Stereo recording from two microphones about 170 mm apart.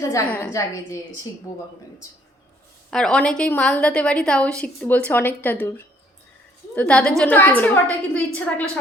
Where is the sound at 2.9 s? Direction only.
5° left (ahead or behind).